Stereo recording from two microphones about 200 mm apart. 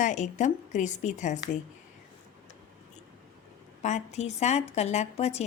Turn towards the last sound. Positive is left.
turn(degrees=35)  # may be behind; listen again after turning